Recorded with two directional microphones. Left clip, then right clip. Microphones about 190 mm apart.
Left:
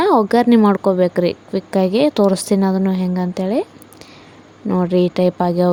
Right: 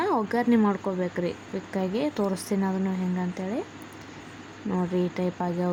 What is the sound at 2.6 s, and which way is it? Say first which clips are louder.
Speech: left 11 dB; 35° left (ahead or behind).